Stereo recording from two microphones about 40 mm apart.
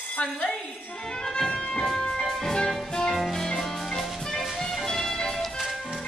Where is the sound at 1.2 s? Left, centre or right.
Centre.